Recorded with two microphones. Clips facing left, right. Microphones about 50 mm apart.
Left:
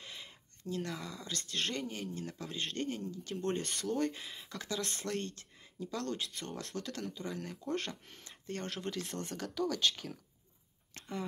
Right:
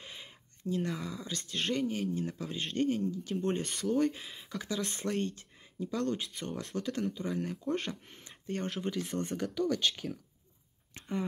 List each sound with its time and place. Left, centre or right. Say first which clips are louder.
0.0 s speech: right 1 dB; centre
11.0 s speech: right 5 dB; centre